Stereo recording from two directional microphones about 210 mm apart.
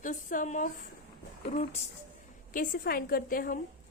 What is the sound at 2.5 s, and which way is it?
A woman's voice, 45° left (ahead or behind).